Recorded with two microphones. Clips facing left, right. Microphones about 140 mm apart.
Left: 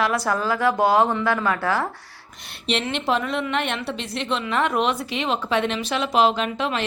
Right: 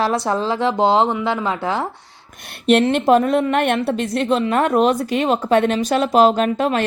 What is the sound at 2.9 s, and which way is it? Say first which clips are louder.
Speech: right 9 dB; 45° right (ahead or behind).